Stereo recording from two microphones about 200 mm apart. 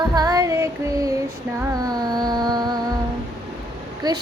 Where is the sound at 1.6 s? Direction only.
15° right (ahead or behind).